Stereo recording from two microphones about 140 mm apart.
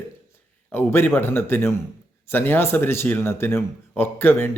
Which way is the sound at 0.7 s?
15° left (ahead or behind).